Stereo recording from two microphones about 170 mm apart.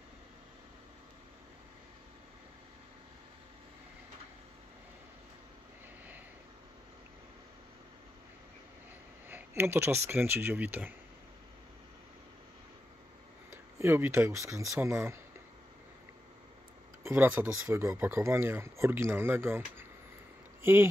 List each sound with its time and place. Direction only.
9.3 s speech: 15° right (ahead or behind)
13.5 s speech: 15° right (ahead or behind)
17.0 s speech: 15° right (ahead or behind)